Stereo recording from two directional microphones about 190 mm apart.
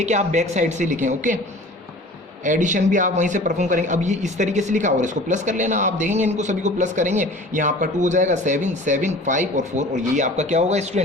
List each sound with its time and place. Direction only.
0.0 s a man's voice: 40° right (ahead or behind)
2.4 s a man's voice: 40° right (ahead or behind)